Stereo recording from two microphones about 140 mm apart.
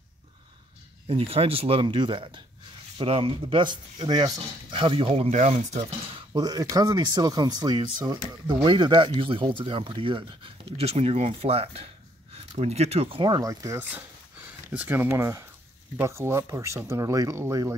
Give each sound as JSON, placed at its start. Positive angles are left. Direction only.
{"t": 1.0, "sound": "speech", "side_deg": -45}
{"t": 13.7, "sound": "speech", "side_deg": -10}